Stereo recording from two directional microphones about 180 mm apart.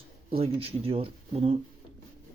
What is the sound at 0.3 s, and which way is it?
Speech, 35° right (ahead or behind).